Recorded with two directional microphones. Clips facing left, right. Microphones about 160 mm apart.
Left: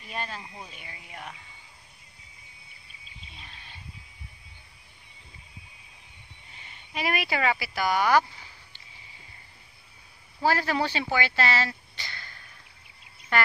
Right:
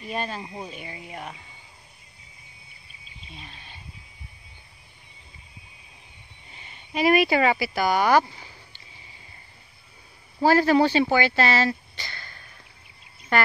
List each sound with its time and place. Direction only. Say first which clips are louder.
0.1 s speech: right 5 dB; 25° right (ahead or behind)
0.6 s speech: right 8 dB; 40° right (ahead or behind)
0.8 s speech: right 6 dB; 25° right (ahead or behind)
6.9 s speech: right 9 dB; 30° right (ahead or behind)
10.4 s speech: right 7 dB; 40° right (ahead or behind)